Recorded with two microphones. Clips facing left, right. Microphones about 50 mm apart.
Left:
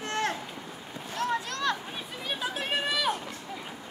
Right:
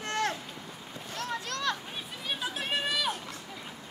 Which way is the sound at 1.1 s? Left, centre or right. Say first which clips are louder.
Left 5 dB; left.